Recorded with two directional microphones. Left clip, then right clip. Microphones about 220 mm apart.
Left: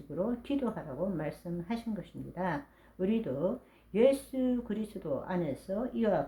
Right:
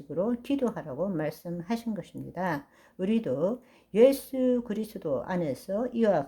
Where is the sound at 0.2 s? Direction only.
45° right (ahead or behind).